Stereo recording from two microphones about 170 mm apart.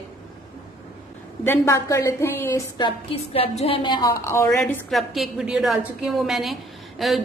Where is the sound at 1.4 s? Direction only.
15° left (ahead or behind).